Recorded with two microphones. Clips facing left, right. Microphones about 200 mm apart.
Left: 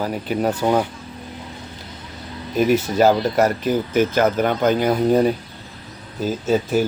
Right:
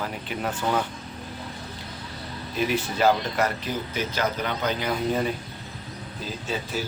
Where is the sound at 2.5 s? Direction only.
40° left (ahead or behind).